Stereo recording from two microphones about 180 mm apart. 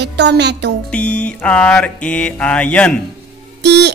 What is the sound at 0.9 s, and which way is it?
Mantra, 5° left (ahead or behind).